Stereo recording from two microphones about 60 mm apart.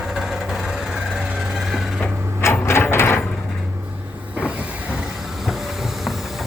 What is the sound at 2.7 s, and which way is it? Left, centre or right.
Mechanisms, left.